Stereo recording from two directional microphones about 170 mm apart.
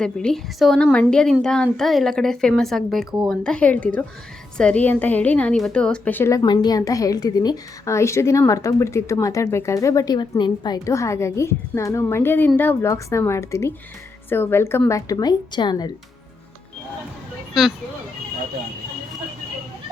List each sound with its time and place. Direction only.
0.0 s a woman's voice: 5° left (ahead or behind); by 15.9 s 25° left (ahead or behind)
17.5 s speech: centre (ahead or behind)